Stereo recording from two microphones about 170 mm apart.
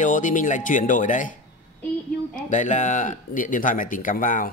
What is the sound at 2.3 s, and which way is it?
Speech, 45° left (ahead or behind).